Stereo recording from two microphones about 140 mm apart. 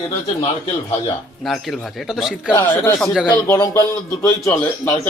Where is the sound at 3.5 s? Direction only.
25° left (ahead or behind).